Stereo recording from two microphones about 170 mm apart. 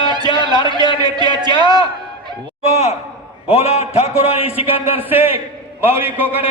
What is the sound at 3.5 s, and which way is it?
A man's voice, 35° left (ahead or behind).